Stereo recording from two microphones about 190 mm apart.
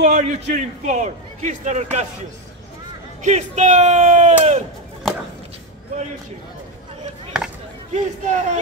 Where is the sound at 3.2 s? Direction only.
40° right (ahead or behind).